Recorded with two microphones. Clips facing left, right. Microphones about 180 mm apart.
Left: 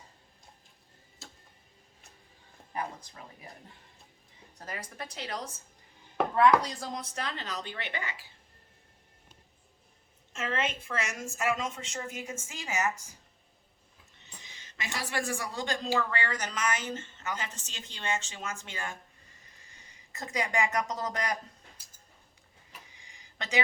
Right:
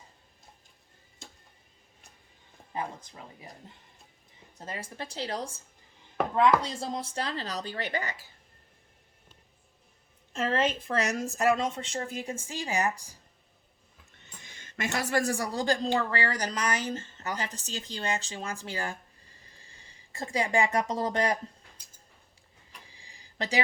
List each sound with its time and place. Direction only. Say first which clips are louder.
1.2 s tick-tock: right 1 dB; centre (ahead or behind)
2.7 s a woman's voice: right 1 dB; 20° right (ahead or behind)
4.5 s a woman's voice: right 2 dB; 25° right (ahead or behind)
6.6 s speech: right 3 dB; 25° right (ahead or behind); by 8.3 s 40° right (ahead or behind)
10.3 s speech: right 5 dB; 35° right (ahead or behind)
14.4 s speech: right 8 dB; 50° right (ahead or behind); by 21.3 s 30° right (ahead or behind)
22.9 s a sound: right 2 dB; 30° right (ahead or behind)